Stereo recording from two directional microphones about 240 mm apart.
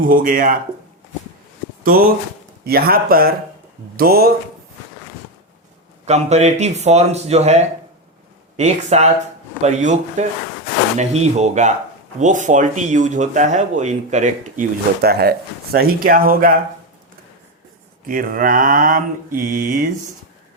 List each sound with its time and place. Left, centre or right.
0.0 s speech: right
1.8 s speech: right
6.1 s speech: right
18.0 s speech: right